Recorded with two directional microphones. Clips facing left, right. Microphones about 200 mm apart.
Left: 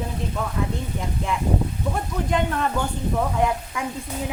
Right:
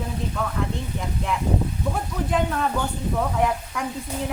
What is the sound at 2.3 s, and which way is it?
Speech, centre (ahead or behind).